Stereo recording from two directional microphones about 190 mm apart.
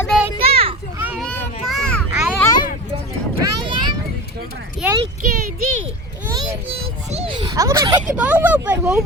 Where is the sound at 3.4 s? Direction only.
25° right (ahead or behind).